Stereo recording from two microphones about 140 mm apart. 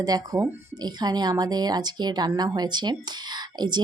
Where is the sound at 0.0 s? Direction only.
25° right (ahead or behind).